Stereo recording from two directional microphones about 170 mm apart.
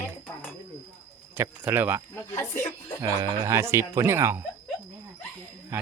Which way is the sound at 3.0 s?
20° right (ahead or behind).